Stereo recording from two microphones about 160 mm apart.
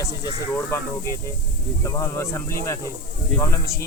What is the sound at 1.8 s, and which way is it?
Speech, 15° left (ahead or behind).